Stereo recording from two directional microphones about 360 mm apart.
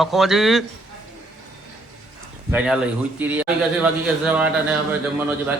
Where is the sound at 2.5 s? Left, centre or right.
Centre.